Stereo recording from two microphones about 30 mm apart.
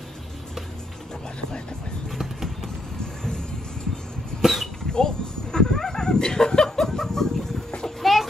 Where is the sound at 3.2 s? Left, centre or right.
Left.